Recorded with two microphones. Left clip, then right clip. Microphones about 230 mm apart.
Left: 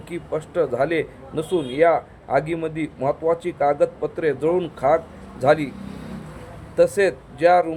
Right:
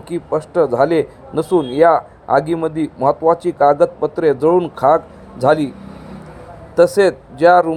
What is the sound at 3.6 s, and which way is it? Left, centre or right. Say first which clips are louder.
A man's voice: right 7 dB; centre.